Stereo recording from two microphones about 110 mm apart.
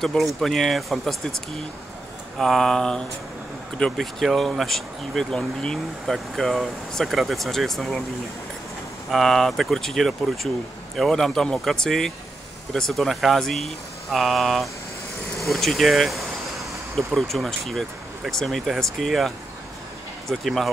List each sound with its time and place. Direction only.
0.0 s speech: centre (ahead or behind)
2.3 s speech: centre (ahead or behind)
9.1 s speech: centre (ahead or behind)